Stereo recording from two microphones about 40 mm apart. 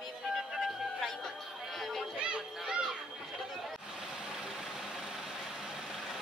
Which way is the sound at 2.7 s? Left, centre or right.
Centre.